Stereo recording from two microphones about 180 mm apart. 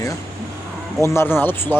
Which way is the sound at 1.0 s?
15° left (ahead or behind).